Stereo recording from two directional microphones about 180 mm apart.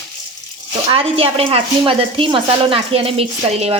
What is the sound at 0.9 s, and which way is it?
A woman's voice, 30° right (ahead or behind).